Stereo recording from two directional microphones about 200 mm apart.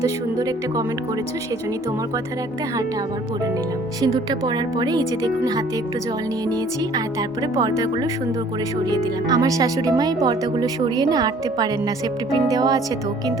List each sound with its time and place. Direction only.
0.0 s a woman's voice: 20° right (ahead or behind)
4.0 s speech: 20° right (ahead or behind)
8.9 s speech: 20° right (ahead or behind)